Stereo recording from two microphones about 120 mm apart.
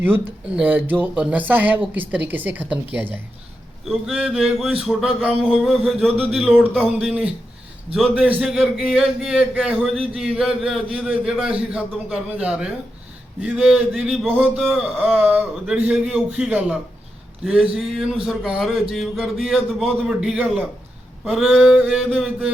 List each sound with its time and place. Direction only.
0.0 s speech: 10° right (ahead or behind)
6.1 s speech: 10° right (ahead or behind)
14.3 s speech: 15° right (ahead or behind)